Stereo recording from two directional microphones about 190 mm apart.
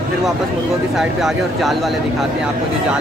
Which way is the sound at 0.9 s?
Centre (ahead or behind).